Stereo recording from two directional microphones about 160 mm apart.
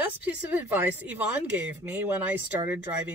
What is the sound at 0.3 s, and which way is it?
Speech, 10° right (ahead or behind).